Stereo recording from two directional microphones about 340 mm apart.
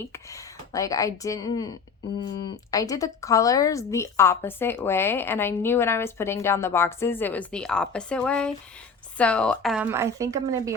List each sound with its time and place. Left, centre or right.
0.0 s a woman's voice: centre